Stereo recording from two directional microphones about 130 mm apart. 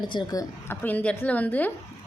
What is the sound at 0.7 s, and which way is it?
A woman's voice, 10° left (ahead or behind).